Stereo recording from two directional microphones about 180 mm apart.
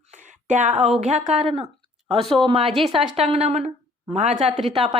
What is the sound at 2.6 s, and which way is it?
Speech, centre (ahead or behind).